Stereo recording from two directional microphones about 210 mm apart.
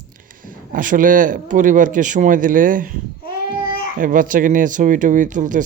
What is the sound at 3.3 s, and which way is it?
Babbling, 45° left (ahead or behind).